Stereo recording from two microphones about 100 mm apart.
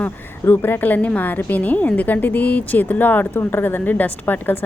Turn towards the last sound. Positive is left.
turn(degrees=20)  # may be behind; listen again after turning